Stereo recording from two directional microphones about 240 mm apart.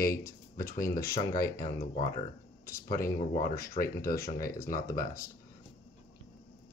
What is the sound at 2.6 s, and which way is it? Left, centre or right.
Speech, left.